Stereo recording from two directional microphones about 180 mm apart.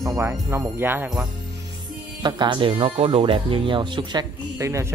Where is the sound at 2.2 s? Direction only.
25° right (ahead or behind).